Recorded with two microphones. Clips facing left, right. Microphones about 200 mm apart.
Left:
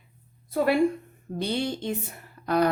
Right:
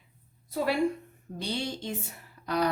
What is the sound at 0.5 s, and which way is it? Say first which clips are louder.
A woman's voice: left 5 dB; 55° left (ahead or behind).